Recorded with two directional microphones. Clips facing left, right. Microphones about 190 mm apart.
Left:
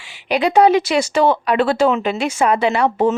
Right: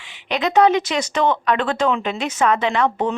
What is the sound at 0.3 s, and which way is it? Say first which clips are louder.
Speech: left 3 dB; 10° left (ahead or behind).